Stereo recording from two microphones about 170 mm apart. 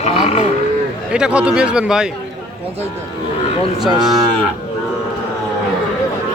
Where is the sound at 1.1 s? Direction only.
5° right (ahead or behind).